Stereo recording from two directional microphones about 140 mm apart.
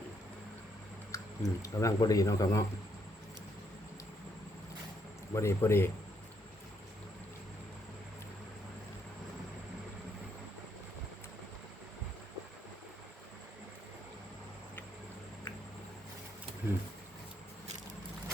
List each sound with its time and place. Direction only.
1.1 s speech: 25° left (ahead or behind)
5.3 s speech: 20° left (ahead or behind)